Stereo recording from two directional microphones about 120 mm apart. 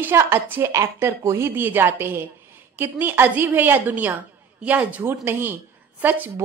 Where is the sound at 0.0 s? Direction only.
20° right (ahead or behind).